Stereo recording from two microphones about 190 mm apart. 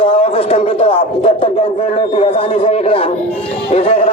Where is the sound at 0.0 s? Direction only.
30° left (ahead or behind).